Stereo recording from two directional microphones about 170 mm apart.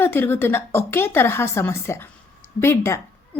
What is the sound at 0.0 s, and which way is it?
Speech, 15° left (ahead or behind).